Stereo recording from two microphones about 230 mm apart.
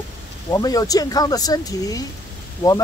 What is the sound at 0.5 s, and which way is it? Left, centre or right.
Speech, centre.